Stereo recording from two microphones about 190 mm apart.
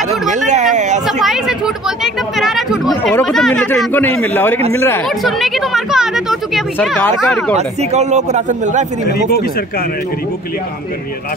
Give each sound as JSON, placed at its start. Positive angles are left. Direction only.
{"t": 0.5, "sound": "a man's voice", "side_deg": -40}
{"t": 1.0, "sound": "a man's voice", "side_deg": 0}
{"t": 5.2, "sound": "speech", "side_deg": 0}
{"t": 7.5, "sound": "a man's voice", "side_deg": -35}